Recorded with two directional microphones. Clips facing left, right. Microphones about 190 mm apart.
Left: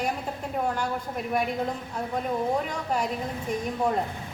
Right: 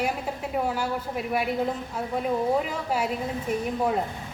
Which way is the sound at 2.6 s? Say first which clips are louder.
Right 1 dB; 5° right (ahead or behind).